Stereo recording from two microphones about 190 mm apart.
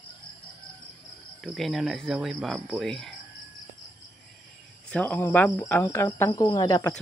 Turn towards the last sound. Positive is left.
turn(degrees=20)  # may be behind; listen again after turning